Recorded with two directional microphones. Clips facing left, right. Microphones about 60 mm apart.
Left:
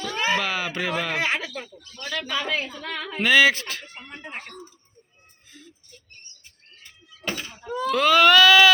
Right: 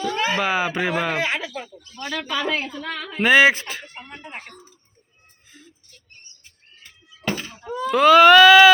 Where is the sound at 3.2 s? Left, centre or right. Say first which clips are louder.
Right 3 dB; right.